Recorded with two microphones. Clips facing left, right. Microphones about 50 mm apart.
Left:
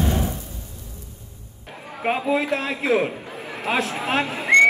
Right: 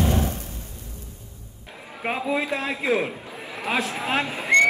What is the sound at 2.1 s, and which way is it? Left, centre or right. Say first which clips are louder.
Speech: left 3 dB; left.